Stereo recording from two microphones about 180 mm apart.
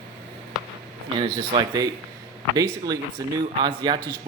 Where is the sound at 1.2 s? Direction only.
25° right (ahead or behind).